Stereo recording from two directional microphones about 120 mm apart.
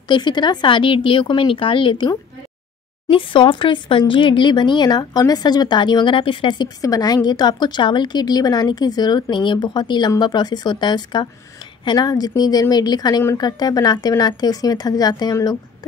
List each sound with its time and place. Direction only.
0.1 s speech: 40° left (ahead or behind)